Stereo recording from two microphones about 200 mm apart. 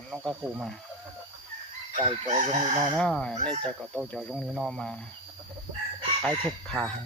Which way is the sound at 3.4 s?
25° right (ahead or behind).